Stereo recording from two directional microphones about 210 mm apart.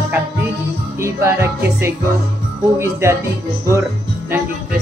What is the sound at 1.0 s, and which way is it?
Speech, 10° right (ahead or behind).